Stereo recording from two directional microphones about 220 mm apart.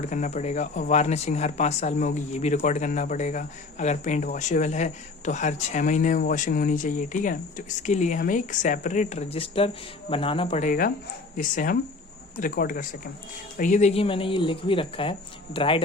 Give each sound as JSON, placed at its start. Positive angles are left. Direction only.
{"t": 0.0, "sound": "speech", "side_deg": 35}
{"t": 10.7, "sound": "speech", "side_deg": 40}